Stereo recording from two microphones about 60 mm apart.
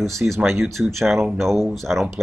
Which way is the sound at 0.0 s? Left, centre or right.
Centre.